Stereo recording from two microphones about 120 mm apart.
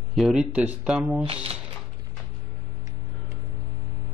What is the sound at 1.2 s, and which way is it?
Speech, 55° right (ahead or behind).